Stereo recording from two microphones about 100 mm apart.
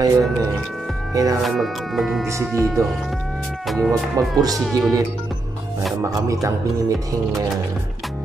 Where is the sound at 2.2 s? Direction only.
30° right (ahead or behind).